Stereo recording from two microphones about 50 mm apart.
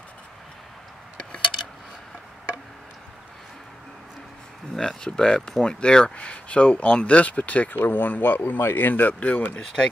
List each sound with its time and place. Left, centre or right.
4.7 s speech: centre; by 9.5 s left